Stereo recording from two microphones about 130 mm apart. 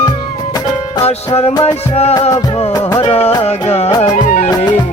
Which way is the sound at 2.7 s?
25° left (ahead or behind).